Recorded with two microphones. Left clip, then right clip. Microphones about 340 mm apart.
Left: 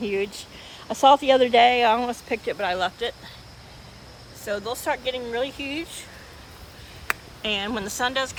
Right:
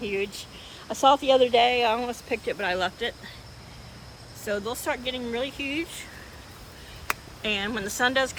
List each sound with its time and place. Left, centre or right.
0.0 s speech: left
0.9 s speech: left
4.4 s speech: centre
7.1 s speech: centre